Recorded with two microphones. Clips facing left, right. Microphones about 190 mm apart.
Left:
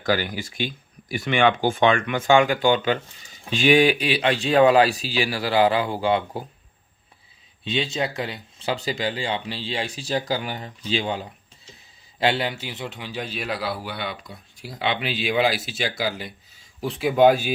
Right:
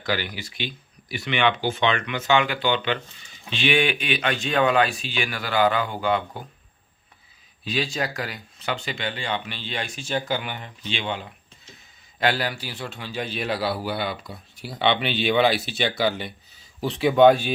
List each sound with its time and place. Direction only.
0.0 s speech: 45° left (ahead or behind); by 6.4 s 30° left (ahead or behind)
7.6 s speech: 25° left (ahead or behind)
12.2 s a man's voice: 25° left (ahead or behind)
13.3 s speech: centre (ahead or behind)